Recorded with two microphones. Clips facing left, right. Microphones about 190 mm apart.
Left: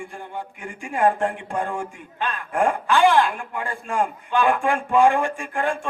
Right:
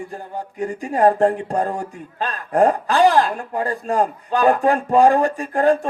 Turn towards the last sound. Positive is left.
turn(degrees=-40)  # may be behind; listen again after turning